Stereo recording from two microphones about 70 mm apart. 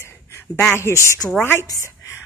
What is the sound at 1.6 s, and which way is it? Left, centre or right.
Speech, left.